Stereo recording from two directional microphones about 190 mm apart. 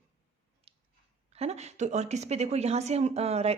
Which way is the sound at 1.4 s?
35° right (ahead or behind).